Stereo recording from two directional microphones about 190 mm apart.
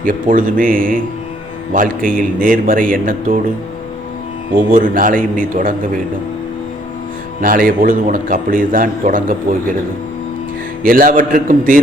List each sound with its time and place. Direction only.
0.0 s a man's voice: 45° right (ahead or behind)
4.7 s a man's voice: 45° right (ahead or behind)
7.4 s a man's voice: 50° right (ahead or behind)
10.8 s a man's voice: 45° right (ahead or behind)